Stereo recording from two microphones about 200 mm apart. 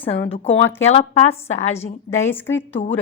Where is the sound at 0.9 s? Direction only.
30° left (ahead or behind).